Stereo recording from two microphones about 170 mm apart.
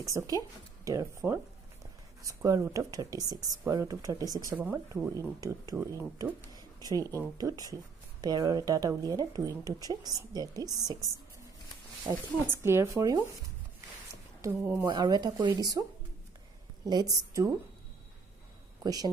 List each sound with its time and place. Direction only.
0.0 s speech: 20° right (ahead or behind)
6.5 s a sound: 20° right (ahead or behind)
7.3 s speech: 20° right (ahead or behind)
12.4 s speech: 15° right (ahead or behind)
14.4 s speech: 10° right (ahead or behind)
14.9 s speech: 25° right (ahead or behind)
16.8 s speech: 20° right (ahead or behind)
18.8 s a woman's voice: 20° right (ahead or behind)